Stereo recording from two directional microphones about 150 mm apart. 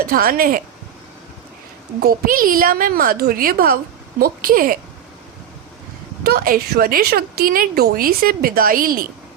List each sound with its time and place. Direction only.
0.0 s a woman's voice: 85° right
2.0 s a woman's voice: 75° right (ahead or behind)
6.2 s a woman's voice: 80° right